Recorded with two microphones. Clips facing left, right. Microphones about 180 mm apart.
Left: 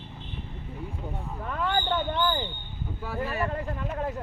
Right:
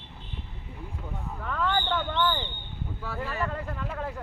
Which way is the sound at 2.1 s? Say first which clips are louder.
Even; 35° left (ahead or behind).